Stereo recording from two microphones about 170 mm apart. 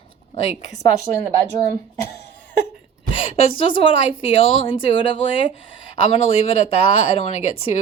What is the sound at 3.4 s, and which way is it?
Speech, 35° left (ahead or behind).